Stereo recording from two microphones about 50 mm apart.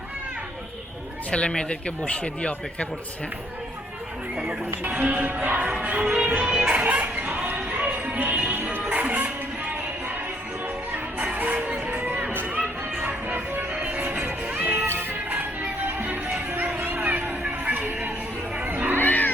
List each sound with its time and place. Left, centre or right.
1.3 s speech: left
5.0 s music: right
11.3 s music: right
11.9 s a sound: right
13.2 s music: right
14.8 s music: right
18.9 s music: left